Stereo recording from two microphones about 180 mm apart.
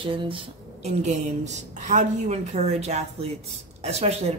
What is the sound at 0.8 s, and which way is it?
Speech, 40° right (ahead or behind).